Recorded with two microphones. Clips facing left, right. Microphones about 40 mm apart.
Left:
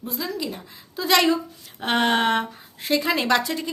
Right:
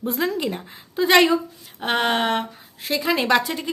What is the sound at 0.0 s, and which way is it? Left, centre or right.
Speech, right.